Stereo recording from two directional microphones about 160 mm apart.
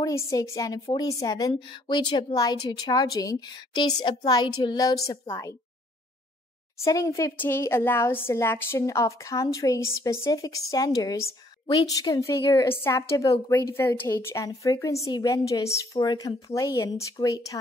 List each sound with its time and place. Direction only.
0.0 s a woman's voice: 20° left (ahead or behind)
6.8 s a woman's voice: 20° left (ahead or behind)